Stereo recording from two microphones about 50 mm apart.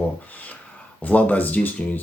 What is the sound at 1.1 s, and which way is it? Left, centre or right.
Speech, left.